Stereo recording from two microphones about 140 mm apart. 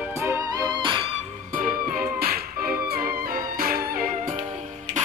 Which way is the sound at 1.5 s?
80° right.